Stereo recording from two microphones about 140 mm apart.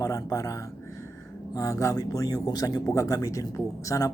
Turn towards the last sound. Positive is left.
turn(degrees=25)  # may be behind; listen again after turning